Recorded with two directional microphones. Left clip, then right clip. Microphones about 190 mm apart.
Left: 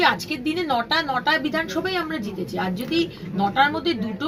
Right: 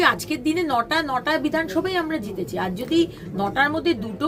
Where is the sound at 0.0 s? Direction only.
35° right (ahead or behind).